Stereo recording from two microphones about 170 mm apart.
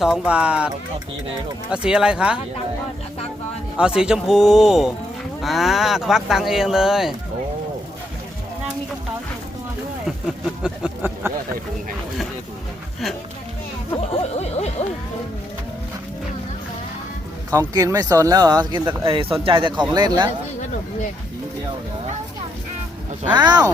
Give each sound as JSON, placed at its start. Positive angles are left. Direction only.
{"t": 0.0, "sound": "speech", "side_deg": -5}
{"t": 1.7, "sound": "speech", "side_deg": -5}
{"t": 3.8, "sound": "speech", "side_deg": -5}
{"t": 10.6, "sound": "a sound", "side_deg": -10}
{"t": 13.9, "sound": "music", "side_deg": 35}
{"t": 17.5, "sound": "speech", "side_deg": -15}
{"t": 23.3, "sound": "speech", "side_deg": -25}